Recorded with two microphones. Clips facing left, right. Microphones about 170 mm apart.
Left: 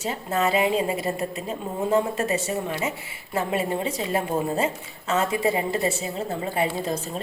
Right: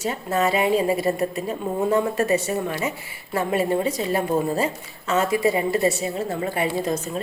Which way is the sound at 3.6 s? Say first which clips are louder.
Right 4 dB; 30° left (ahead or behind).